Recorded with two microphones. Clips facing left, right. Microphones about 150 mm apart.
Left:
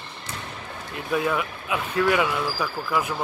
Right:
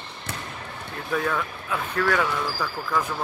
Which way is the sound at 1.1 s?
10° left (ahead or behind).